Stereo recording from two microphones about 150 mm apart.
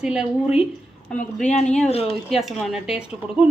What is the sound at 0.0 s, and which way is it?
Speech, 5° right (ahead or behind).